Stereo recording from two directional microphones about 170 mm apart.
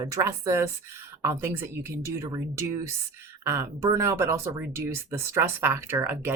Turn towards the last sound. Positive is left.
turn(degrees=-15)  # may be behind; listen again after turning